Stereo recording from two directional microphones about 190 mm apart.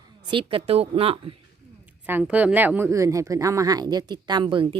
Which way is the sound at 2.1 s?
10° right (ahead or behind).